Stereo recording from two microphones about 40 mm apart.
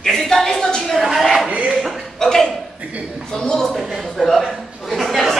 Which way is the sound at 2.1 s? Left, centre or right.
Centre.